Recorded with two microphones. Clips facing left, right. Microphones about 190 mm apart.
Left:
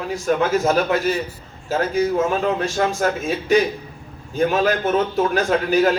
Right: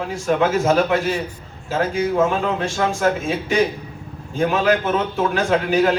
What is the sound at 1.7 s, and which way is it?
A man's voice, 40° left (ahead or behind).